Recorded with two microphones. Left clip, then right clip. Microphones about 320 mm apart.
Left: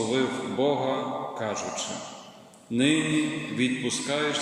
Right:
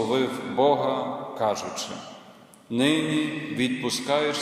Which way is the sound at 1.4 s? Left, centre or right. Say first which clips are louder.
Right 4 dB; centre.